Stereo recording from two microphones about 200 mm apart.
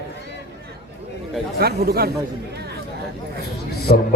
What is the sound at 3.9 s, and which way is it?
Speech, 50° left (ahead or behind).